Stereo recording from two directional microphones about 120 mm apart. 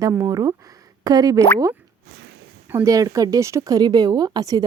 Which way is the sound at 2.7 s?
25° right (ahead or behind).